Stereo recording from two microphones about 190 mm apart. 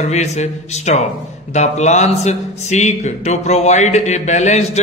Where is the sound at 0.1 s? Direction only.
35° left (ahead or behind).